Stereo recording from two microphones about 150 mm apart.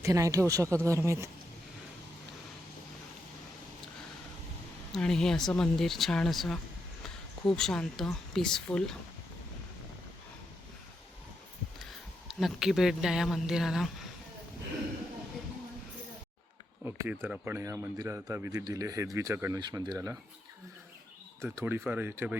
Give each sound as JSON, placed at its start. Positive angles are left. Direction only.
{"t": 0.0, "sound": "speech", "side_deg": -20}
{"t": 4.9, "sound": "speech", "side_deg": 5}
{"t": 12.3, "sound": "speech", "side_deg": 0}
{"t": 16.8, "sound": "speech", "side_deg": -15}
{"t": 21.4, "sound": "speech", "side_deg": -15}